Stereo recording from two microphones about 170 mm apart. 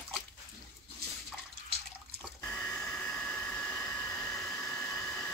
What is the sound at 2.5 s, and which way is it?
Hair dryer, 5° left (ahead or behind).